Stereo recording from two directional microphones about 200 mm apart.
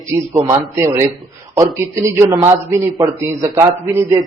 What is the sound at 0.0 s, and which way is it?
A man's voice, 15° right (ahead or behind).